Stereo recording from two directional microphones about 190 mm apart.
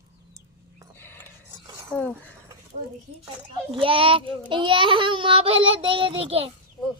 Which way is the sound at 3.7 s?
30° right (ahead or behind).